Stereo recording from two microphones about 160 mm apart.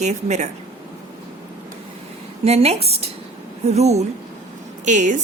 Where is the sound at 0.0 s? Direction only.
45° right (ahead or behind).